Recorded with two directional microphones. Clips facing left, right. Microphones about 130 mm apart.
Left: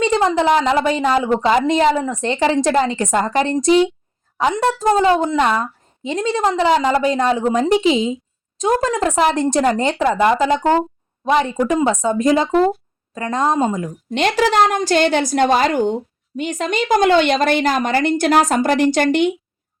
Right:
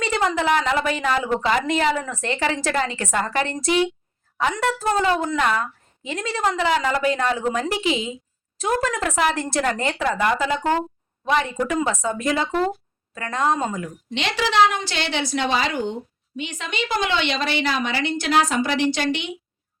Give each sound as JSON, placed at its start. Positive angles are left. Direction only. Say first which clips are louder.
{"t": 0.0, "sound": "a woman's voice", "louder": "left 6 dB", "side_deg": 30}
{"t": 14.1, "sound": "a woman's voice", "louder": "left 8 dB", "side_deg": 45}